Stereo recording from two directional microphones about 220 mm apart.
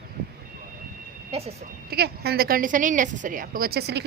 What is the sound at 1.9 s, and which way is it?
A woman's voice, 45° right (ahead or behind).